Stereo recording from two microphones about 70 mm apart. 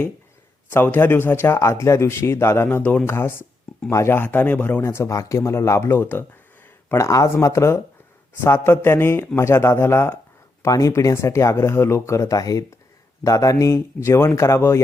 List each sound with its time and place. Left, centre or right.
0.7 s a man's voice: left
2.6 s speech: left
3.1 s a man's voice: left
4.8 s a man's voice: left
6.9 s a man's voice: left
10.6 s speech: left